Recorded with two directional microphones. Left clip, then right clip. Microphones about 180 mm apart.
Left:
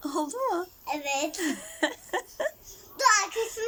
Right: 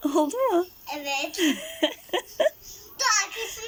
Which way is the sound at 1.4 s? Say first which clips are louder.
Right 5 dB; 5° right (ahead or behind).